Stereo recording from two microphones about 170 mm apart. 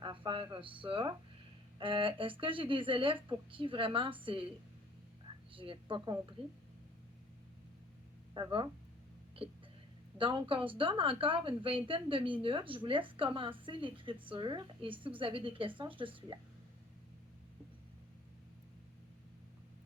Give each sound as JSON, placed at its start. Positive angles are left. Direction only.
{"t": 0.0, "sound": "a woman's voice", "side_deg": -30}
{"t": 5.5, "sound": "a woman's voice", "side_deg": -30}
{"t": 8.3, "sound": "speech", "side_deg": -25}
{"t": 10.2, "sound": "a woman's voice", "side_deg": -30}